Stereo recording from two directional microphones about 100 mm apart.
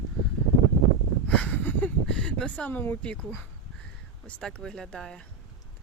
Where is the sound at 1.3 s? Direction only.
15° left (ahead or behind).